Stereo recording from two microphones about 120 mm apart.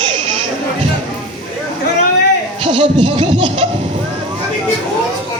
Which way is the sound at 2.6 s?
50° right (ahead or behind).